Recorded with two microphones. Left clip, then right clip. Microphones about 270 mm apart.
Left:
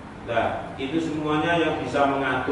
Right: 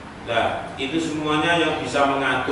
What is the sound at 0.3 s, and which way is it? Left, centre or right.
A man's voice, centre.